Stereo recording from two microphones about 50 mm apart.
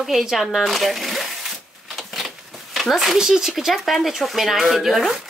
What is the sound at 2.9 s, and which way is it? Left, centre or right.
Speech, centre.